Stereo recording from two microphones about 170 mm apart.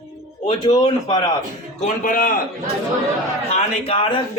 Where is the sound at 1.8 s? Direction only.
55° left (ahead or behind).